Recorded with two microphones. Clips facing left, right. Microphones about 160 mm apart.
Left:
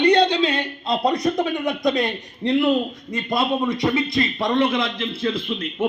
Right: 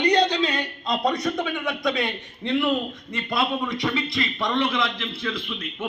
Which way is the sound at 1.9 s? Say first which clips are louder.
Left 4 dB; 40° left (ahead or behind).